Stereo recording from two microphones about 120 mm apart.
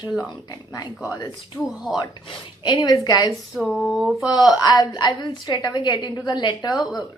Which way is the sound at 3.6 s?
Centre (ahead or behind).